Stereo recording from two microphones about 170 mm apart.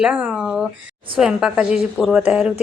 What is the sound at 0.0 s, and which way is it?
Speech, 10° right (ahead or behind).